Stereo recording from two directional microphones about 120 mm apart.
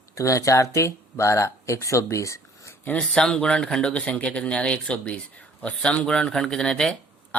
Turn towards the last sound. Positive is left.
turn(degrees=5)  # may be behind; listen again after turning